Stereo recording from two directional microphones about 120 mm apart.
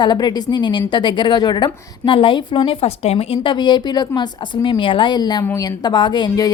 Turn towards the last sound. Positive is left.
turn(degrees=35)  # may be behind; listen again after turning